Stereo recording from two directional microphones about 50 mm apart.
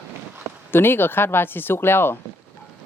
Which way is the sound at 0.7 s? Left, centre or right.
Left.